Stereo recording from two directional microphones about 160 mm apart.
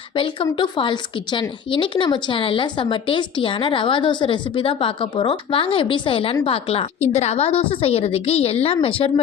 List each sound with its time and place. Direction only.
0.5 s speech: 30° left (ahead or behind)